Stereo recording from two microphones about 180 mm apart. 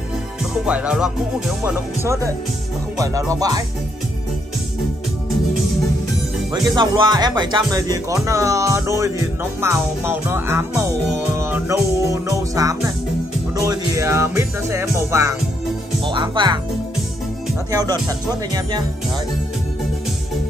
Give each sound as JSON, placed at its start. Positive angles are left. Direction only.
{"t": 0.7, "sound": "speech", "side_deg": -5}
{"t": 3.0, "sound": "speech", "side_deg": -20}
{"t": 6.5, "sound": "speech", "side_deg": -25}
{"t": 17.6, "sound": "speech", "side_deg": -20}